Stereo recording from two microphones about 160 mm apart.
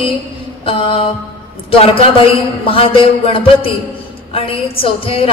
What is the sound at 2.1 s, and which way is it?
A woman's voice, 35° left (ahead or behind).